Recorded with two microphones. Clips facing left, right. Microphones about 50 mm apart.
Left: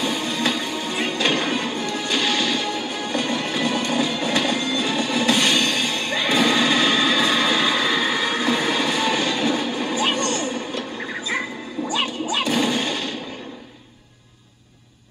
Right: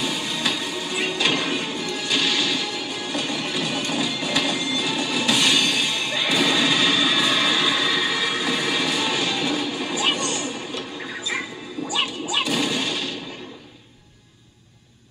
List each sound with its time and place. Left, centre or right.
0.0 s music: left
4.5 s train: left
6.2 s music: left
6.9 s train: left
10.1 s music: left
11.9 s music: left